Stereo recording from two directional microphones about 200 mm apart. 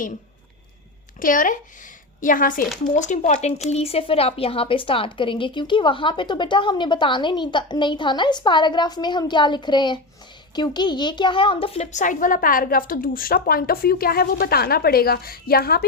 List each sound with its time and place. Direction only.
1.2 s a woman's voice: 40° left (ahead or behind)